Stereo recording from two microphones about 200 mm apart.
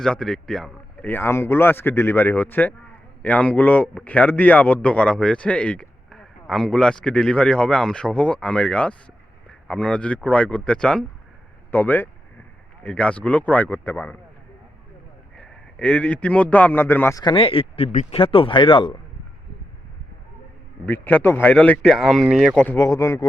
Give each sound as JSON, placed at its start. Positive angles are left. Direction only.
{"t": 0.0, "sound": "a man's voice", "side_deg": 5}
{"t": 15.4, "sound": "a man's voice", "side_deg": 5}
{"t": 20.8, "sound": "a man's voice", "side_deg": 10}